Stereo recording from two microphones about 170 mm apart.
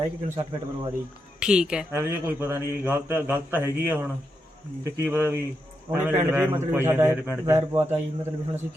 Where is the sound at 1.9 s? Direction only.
15° right (ahead or behind).